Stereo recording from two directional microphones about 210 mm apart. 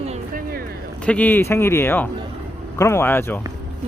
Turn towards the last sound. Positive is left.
turn(degrees=10)  # may be behind; listen again after turning